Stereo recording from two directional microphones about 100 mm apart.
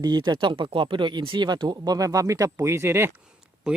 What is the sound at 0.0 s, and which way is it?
Speech, 45° right (ahead or behind).